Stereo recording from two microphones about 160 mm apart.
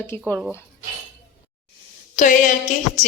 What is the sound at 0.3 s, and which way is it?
Speech, 5° right (ahead or behind).